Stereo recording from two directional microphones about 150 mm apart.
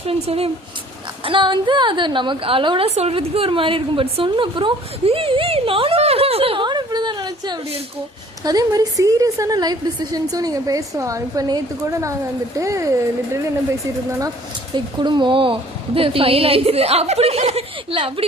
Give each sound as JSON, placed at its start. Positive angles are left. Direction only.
{"t": 0.1, "sound": "a woman's voice", "side_deg": -40}
{"t": 14.9, "sound": "a woman's voice", "side_deg": -30}